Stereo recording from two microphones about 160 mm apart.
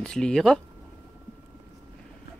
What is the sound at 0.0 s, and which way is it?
Speech, 5° left (ahead or behind).